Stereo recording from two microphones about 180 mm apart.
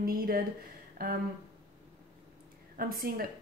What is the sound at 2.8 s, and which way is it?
Speech, 55° right (ahead or behind).